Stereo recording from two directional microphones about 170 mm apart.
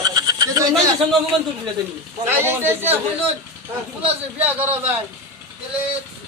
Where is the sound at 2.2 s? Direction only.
10° right (ahead or behind).